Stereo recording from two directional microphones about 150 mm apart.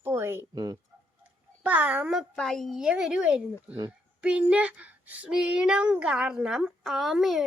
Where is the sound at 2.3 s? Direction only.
5° left (ahead or behind).